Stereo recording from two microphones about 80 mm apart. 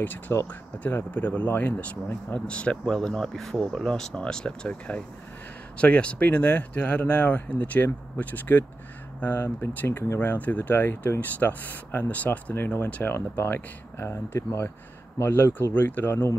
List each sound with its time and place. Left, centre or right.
0.0 s speech: left